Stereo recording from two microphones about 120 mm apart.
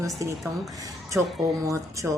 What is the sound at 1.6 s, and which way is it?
Speech, 30° right (ahead or behind).